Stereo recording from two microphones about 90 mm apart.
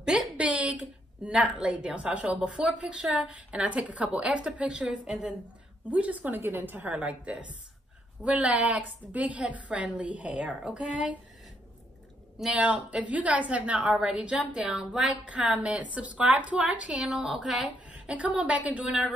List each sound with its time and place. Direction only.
0.0 s a woman's voice: 10° right (ahead or behind)
5.9 s a woman's voice: 15° right (ahead or behind)
6.8 s a woman's voice: 10° right (ahead or behind)
12.5 s a woman's voice: 15° right (ahead or behind)
17.8 s a woman's voice: 15° right (ahead or behind)